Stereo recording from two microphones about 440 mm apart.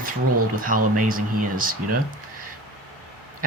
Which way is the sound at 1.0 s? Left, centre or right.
Centre.